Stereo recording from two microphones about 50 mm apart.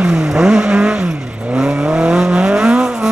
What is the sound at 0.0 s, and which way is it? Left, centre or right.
Vehicle, centre.